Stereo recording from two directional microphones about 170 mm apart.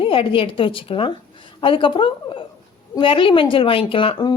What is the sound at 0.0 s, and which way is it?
Speech, 30° left (ahead or behind).